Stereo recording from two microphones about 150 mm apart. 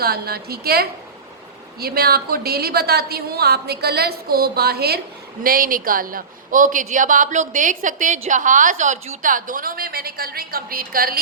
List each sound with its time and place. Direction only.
0.0 s a woman's voice: 90° right
5.4 s a woman's voice: 75° right (ahead or behind)